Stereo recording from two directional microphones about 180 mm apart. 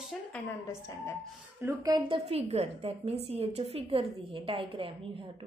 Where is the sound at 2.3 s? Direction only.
35° right (ahead or behind).